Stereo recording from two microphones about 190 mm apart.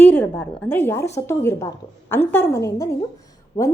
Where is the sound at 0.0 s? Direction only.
10° left (ahead or behind).